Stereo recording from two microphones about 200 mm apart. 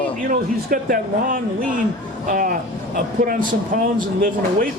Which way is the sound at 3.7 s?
40° right (ahead or behind).